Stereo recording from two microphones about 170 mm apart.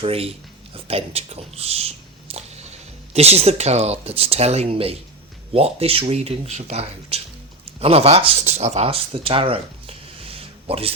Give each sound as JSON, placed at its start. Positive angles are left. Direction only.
{"t": 0.0, "sound": "speech", "side_deg": -35}